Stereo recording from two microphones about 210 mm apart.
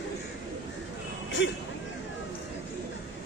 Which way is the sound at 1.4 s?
60° left (ahead or behind).